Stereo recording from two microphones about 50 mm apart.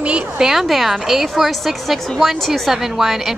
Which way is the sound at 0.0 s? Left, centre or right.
Right.